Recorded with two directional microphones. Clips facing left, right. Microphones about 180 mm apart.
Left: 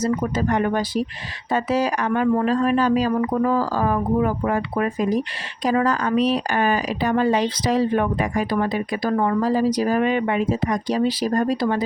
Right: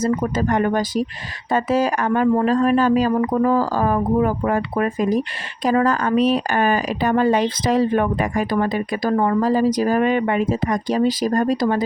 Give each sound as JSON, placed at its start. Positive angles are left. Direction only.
{"t": 0.0, "sound": "speech", "side_deg": -50}